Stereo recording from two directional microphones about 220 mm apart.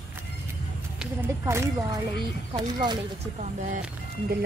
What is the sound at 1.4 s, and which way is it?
Speech, 15° right (ahead or behind).